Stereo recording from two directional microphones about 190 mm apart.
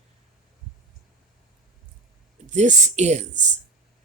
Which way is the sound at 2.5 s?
40° right (ahead or behind).